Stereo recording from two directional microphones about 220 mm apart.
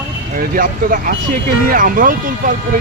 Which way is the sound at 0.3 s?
40° right (ahead or behind).